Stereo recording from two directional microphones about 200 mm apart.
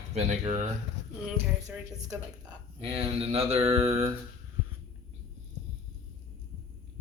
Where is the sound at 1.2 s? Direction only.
10° right (ahead or behind).